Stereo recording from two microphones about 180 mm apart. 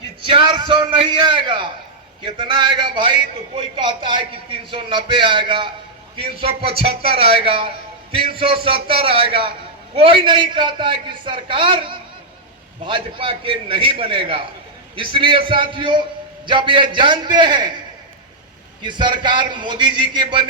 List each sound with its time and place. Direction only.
0.2 s a sound: 30° right (ahead or behind)
2.2 s a man's voice: 25° right (ahead or behind)
18.8 s a man's voice: 25° right (ahead or behind)